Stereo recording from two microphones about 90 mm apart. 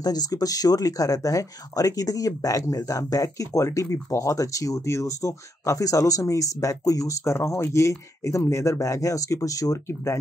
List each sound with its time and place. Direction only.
0.0 s speech: 45° left (ahead or behind)